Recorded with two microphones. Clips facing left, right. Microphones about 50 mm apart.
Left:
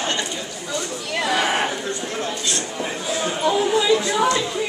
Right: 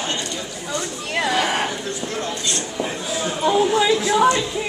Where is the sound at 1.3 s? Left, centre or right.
Centre.